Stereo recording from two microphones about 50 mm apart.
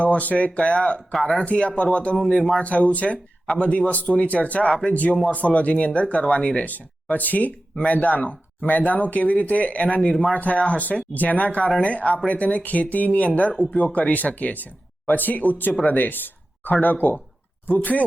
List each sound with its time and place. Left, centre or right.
0.0 s speech: left
4.7 s speech: centre
5.3 s speech: left